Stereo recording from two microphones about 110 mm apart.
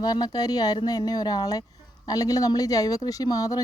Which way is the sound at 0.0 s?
35° left (ahead or behind).